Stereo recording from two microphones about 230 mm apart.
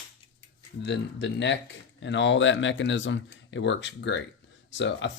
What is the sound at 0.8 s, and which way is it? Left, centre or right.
Speech, left.